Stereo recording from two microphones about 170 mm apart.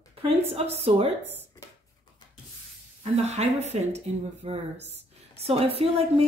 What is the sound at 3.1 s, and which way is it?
A woman's voice, 40° right (ahead or behind).